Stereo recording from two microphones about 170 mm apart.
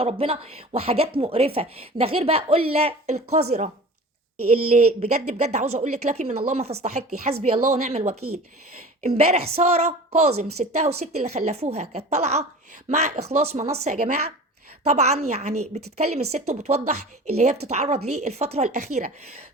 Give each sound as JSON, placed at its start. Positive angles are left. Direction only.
{"t": 0.0, "sound": "a woman's voice", "side_deg": -35}
{"t": 4.9, "sound": "a woman's voice", "side_deg": -45}